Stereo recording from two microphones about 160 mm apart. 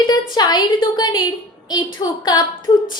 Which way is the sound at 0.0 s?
25° left (ahead or behind).